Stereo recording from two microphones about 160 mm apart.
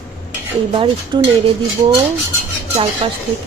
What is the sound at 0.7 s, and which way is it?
Speech, 35° right (ahead or behind).